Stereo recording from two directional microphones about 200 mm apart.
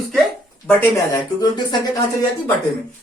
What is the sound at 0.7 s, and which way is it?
Speech, 15° left (ahead or behind).